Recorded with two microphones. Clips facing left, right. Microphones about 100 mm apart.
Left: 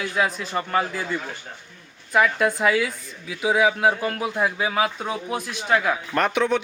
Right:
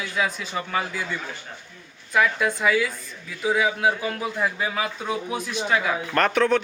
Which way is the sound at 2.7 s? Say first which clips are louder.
Even; 65° left (ahead or behind).